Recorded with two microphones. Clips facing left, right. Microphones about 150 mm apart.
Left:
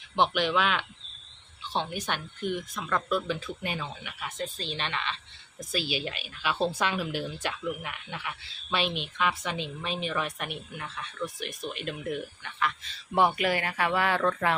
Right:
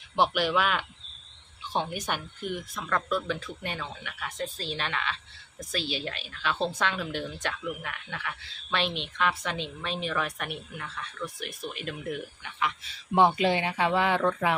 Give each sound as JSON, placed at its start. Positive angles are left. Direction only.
{"t": 0.2, "sound": "a woman's voice", "side_deg": -5}
{"t": 13.2, "sound": "speech", "side_deg": -25}